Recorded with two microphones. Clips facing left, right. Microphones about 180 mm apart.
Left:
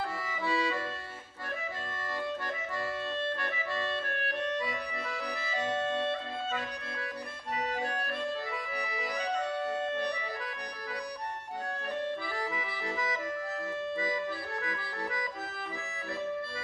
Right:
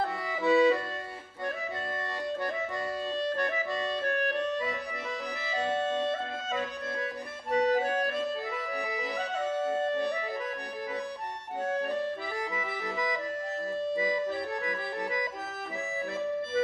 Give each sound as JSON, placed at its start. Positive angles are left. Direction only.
{"t": 0.4, "sound": "accordion", "side_deg": -20}
{"t": 3.2, "sound": "music", "side_deg": -40}
{"t": 7.5, "sound": "accordion", "side_deg": -40}
{"t": 13.9, "sound": "accordion", "side_deg": -20}